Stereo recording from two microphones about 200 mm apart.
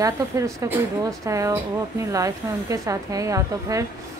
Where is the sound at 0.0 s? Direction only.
15° right (ahead or behind).